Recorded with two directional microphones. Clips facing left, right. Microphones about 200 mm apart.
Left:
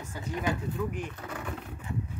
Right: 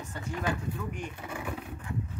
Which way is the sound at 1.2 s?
10° right (ahead or behind).